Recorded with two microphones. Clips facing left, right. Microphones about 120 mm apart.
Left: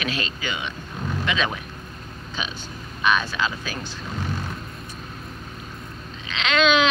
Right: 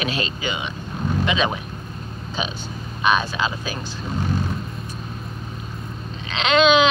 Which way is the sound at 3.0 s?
15° right (ahead or behind).